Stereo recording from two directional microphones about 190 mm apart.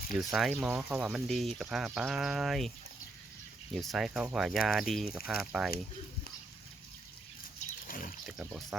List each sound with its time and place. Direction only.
0.1 s speech: centre (ahead or behind)
3.8 s speech: centre (ahead or behind)
7.6 s pig: 45° left (ahead or behind)
8.3 s speech: centre (ahead or behind)